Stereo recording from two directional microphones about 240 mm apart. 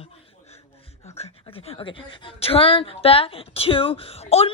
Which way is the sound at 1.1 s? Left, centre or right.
Left.